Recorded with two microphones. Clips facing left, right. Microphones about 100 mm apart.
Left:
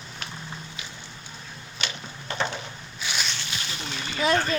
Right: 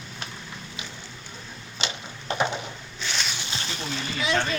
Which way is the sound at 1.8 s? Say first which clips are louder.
Right 2 dB; 20° right (ahead or behind).